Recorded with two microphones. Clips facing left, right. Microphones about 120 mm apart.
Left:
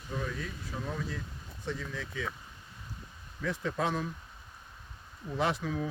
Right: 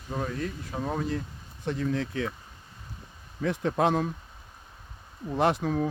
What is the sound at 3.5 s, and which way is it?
Speech, 65° right (ahead or behind).